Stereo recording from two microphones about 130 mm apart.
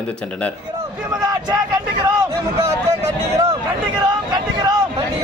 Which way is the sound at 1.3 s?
30° right (ahead or behind).